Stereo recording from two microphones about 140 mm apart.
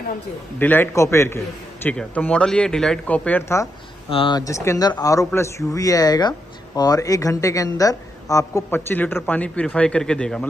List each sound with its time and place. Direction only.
0.6 s a man's voice: 15° left (ahead or behind)
4.1 s speech: 40° left (ahead or behind)
4.4 s speech: 20° left (ahead or behind)